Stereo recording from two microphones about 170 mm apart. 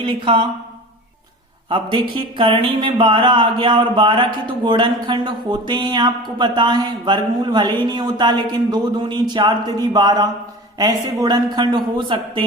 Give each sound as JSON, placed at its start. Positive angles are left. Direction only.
{"t": 0.0, "sound": "speech", "side_deg": -30}
{"t": 1.7, "sound": "speech", "side_deg": -30}